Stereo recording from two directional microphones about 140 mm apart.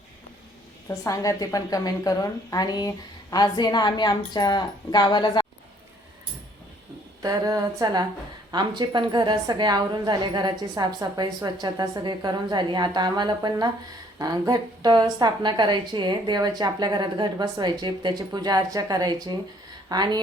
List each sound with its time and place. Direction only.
0.9 s a woman's voice: 25° left (ahead or behind)
7.2 s a woman's voice: 25° right (ahead or behind)